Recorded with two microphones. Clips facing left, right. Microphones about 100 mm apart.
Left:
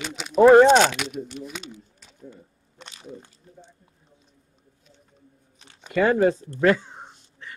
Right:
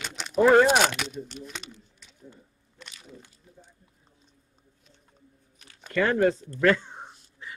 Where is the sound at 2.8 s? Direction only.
25° left (ahead or behind).